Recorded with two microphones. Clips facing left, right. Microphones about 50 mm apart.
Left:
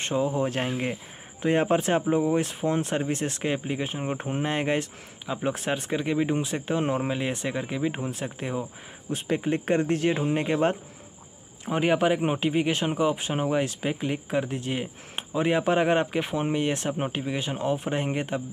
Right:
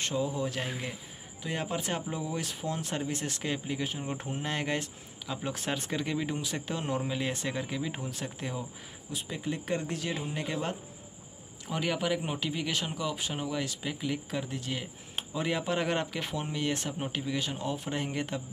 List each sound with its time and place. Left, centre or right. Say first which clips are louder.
0.0 s speech: left 6 dB; left
9.4 s speech: left 6 dB; left